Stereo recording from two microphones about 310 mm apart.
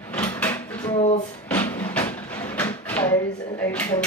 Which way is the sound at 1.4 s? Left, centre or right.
Centre.